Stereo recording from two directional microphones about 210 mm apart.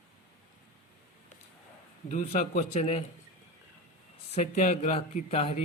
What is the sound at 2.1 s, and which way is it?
Speech, 35° left (ahead or behind).